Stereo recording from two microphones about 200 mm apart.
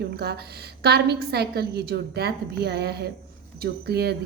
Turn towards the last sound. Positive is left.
turn(degrees=-55)  # may be behind; listen again after turning